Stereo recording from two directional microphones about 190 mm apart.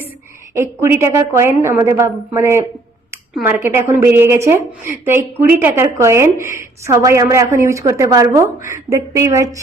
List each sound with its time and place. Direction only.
0.5 s a woman's voice: 15° right (ahead or behind)